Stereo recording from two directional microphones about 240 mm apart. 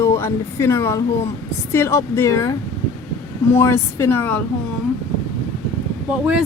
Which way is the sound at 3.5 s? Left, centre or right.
Centre.